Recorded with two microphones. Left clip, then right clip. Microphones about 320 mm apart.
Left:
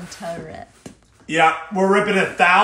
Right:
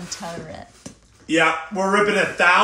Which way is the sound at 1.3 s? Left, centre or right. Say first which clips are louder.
Left 2 dB; centre.